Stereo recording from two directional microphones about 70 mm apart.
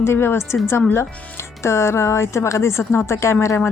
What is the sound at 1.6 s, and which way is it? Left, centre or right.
A woman's voice, left.